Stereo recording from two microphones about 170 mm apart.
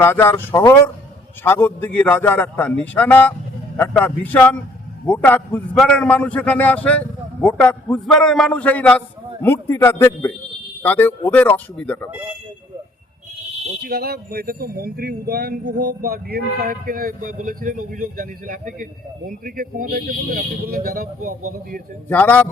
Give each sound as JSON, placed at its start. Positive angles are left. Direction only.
{"t": 0.0, "sound": "a man's voice", "side_deg": 15}
{"t": 13.8, "sound": "speech", "side_deg": -65}
{"t": 22.1, "sound": "a man's voice", "side_deg": 10}